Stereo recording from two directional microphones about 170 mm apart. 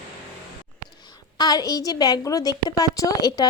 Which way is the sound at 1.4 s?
20° left (ahead or behind).